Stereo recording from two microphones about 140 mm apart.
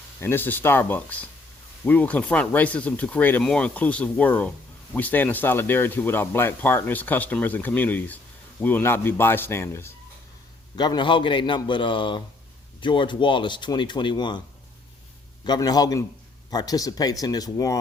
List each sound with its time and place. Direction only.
0.2 s speech: 15° left (ahead or behind)
10.8 s speech: 30° left (ahead or behind)
15.4 s speech: 30° left (ahead or behind)